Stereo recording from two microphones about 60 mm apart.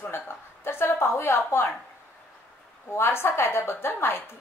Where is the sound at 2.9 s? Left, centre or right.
Left.